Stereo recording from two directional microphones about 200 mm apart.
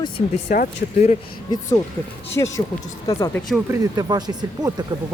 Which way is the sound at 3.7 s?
20° right (ahead or behind).